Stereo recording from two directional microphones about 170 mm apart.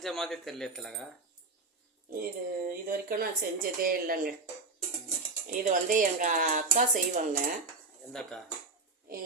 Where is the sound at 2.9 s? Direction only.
60° right (ahead or behind).